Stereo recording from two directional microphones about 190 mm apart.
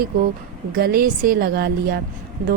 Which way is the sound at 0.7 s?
50° right (ahead or behind).